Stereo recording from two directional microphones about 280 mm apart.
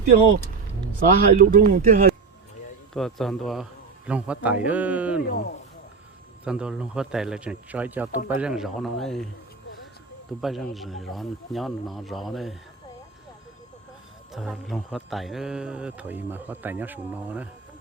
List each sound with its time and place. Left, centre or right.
0.9 s speech: right
2.9 s speech: centre
5.2 s speech: left
6.4 s speech: centre
8.1 s speech: left
8.4 s speech: centre
10.4 s speech: centre
14.3 s speech: centre